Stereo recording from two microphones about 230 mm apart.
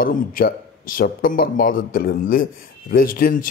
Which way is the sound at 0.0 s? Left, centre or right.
Left.